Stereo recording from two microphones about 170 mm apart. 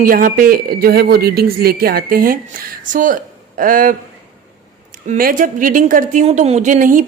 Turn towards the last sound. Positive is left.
turn(degrees=-50)  # may be behind; listen again after turning